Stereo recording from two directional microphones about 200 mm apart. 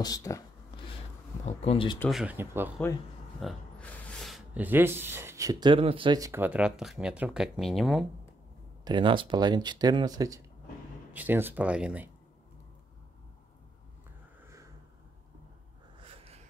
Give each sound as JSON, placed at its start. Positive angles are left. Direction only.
{"t": 0.0, "sound": "a sound", "side_deg": 15}
{"t": 1.4, "sound": "speech", "side_deg": 30}
{"t": 2.0, "sound": "speech", "side_deg": 0}
{"t": 3.3, "sound": "speech", "side_deg": 5}
{"t": 8.8, "sound": "speech", "side_deg": -25}
{"t": 16.0, "sound": "a sound", "side_deg": -30}